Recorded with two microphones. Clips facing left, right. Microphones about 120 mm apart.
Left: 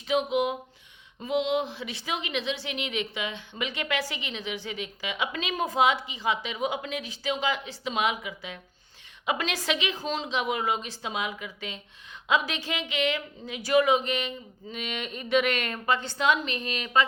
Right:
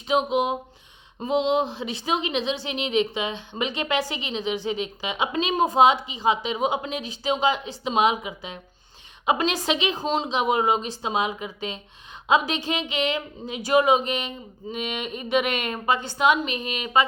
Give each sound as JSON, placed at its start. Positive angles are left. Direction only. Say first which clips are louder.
{"t": 0.1, "sound": "a woman's voice", "louder": "right 3 dB", "side_deg": -25}